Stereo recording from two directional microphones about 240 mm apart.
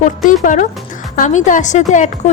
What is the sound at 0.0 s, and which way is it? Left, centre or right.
A woman's voice, left.